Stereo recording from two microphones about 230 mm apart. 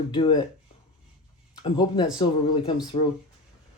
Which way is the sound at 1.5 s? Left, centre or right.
Centre.